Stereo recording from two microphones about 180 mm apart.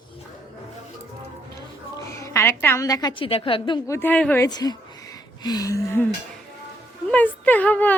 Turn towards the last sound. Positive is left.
turn(degrees=10)  # may be behind; listen again after turning